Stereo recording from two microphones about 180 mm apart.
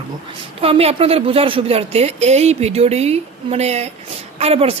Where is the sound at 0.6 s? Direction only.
35° right (ahead or behind).